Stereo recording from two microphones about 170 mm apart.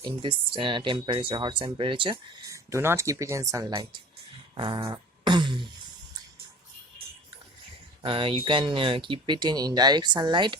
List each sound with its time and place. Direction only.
0.0 s speech: 30° right (ahead or behind)
2.5 s speech: 15° right (ahead or behind)
4.5 s a sound: 30° right (ahead or behind)
8.0 s speech: 30° right (ahead or behind)